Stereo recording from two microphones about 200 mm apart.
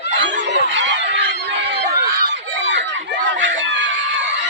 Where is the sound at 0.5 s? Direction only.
65° right (ahead or behind).